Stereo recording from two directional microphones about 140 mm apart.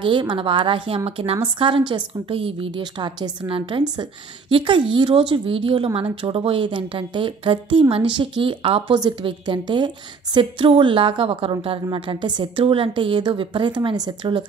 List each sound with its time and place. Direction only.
0.0 s a woman's voice: 35° right (ahead or behind)